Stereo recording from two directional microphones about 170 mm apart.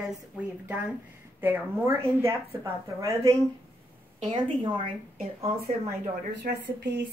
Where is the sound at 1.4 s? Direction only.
10° right (ahead or behind).